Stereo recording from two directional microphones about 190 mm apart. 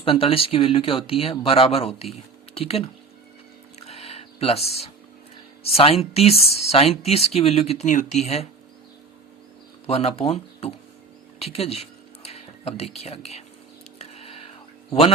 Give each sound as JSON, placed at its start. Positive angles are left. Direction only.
{"t": 0.0, "sound": "speech", "side_deg": 30}
{"t": 3.8, "sound": "a sound", "side_deg": 30}
{"t": 5.6, "sound": "speech", "side_deg": 30}
{"t": 9.8, "sound": "speech", "side_deg": 35}
{"t": 11.3, "sound": "a sound", "side_deg": 30}
{"t": 14.0, "sound": "whispering", "side_deg": 35}